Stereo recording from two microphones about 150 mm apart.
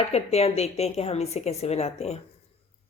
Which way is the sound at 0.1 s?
45° left (ahead or behind).